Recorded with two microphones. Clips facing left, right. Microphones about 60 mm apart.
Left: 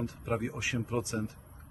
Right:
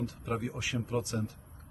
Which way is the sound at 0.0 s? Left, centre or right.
Left.